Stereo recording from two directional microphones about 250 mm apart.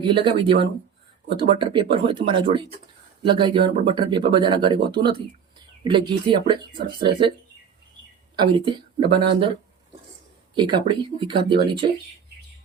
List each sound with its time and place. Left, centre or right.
0.0 s speech: centre
8.5 s speech: centre
10.5 s speech: centre